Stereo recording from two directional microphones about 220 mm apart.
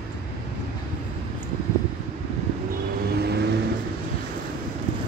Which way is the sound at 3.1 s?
45° right (ahead or behind).